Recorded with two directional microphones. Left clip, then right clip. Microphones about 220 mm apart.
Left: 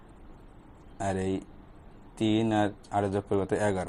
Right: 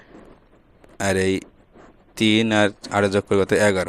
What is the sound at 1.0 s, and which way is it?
Speech, 65° right (ahead or behind).